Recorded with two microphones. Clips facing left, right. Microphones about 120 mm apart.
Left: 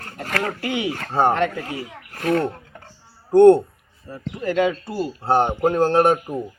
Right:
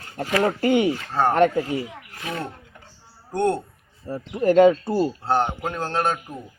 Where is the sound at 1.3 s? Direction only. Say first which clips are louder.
Right 4 dB; 45° right (ahead or behind).